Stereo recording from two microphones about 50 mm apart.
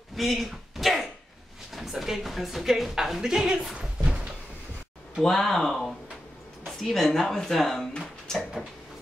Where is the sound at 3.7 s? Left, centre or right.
Right.